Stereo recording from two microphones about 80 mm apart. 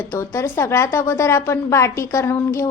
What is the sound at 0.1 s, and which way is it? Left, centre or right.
A woman's voice, left.